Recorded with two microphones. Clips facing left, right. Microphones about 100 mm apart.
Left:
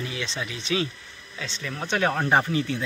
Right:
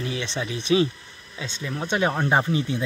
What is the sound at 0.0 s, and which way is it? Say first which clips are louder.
Speech: right 3 dB; 30° right (ahead or behind).